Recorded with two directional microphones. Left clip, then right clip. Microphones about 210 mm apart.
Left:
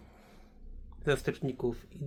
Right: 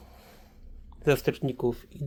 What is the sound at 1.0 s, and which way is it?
Speech, 20° right (ahead or behind).